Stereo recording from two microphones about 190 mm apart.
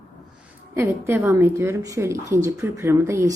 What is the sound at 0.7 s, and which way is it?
Speech, 15° right (ahead or behind).